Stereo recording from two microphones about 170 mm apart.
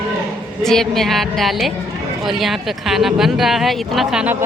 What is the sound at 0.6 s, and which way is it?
A woman's voice, centre (ahead or behind).